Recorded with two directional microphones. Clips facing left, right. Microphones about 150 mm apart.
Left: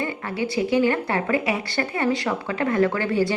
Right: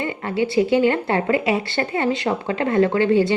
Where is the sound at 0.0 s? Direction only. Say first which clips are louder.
Right 4 dB; 25° right (ahead or behind).